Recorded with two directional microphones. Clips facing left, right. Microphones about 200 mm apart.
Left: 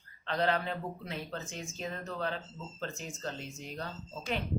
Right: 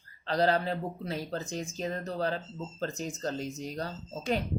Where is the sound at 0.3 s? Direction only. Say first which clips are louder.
Right 4 dB; 35° right (ahead or behind).